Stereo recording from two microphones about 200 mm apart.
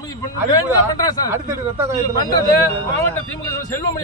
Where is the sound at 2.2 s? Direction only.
20° left (ahead or behind).